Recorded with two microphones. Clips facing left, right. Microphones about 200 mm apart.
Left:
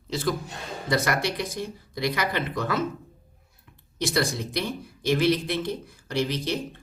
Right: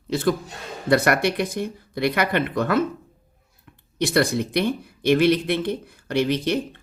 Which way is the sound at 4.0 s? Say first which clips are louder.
Right 6 dB; 60° right (ahead or behind).